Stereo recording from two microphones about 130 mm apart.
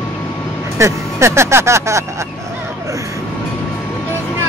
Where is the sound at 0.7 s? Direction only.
20° right (ahead or behind).